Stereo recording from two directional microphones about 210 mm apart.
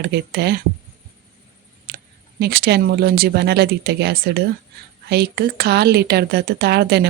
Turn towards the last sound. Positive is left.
turn(degrees=-50)  # may be behind; listen again after turning